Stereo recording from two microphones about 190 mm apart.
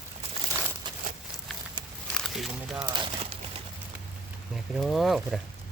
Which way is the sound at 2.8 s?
25° right (ahead or behind).